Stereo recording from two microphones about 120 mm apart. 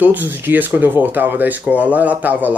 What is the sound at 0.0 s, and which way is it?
Speech, 15° right (ahead or behind).